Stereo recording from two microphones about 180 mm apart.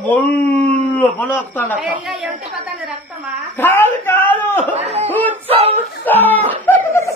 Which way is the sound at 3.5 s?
10° left (ahead or behind).